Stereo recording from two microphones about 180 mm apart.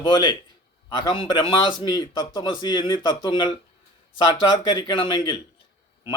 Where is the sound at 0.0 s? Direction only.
25° left (ahead or behind).